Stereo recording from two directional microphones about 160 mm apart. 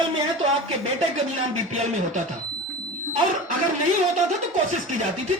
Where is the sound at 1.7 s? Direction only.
50° right (ahead or behind).